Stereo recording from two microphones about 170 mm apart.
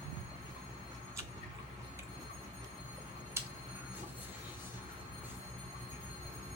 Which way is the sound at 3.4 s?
15° right (ahead or behind).